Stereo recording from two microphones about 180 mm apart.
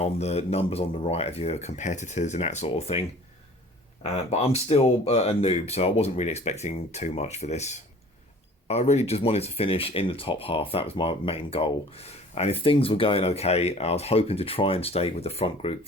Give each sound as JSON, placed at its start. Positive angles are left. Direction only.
{"t": 0.0, "sound": "speech", "side_deg": 35}
{"t": 4.0, "sound": "speech", "side_deg": 35}